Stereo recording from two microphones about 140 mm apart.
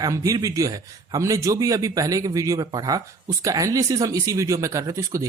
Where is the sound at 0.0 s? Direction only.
25° right (ahead or behind).